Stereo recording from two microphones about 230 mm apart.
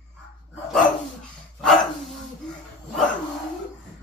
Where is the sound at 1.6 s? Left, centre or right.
Centre.